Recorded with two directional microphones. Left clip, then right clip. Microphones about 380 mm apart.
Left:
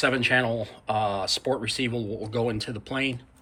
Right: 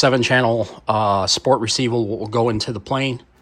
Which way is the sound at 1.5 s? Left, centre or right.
Right.